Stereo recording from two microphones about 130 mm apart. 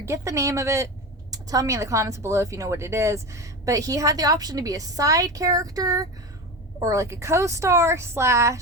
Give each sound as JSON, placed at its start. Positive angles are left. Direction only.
{"t": 0.0, "sound": "a woman's voice", "side_deg": -20}